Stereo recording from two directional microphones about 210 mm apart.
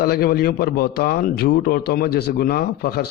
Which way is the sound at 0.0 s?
45° left (ahead or behind).